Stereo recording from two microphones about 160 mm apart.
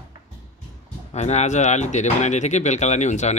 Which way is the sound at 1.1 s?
45° left (ahead or behind).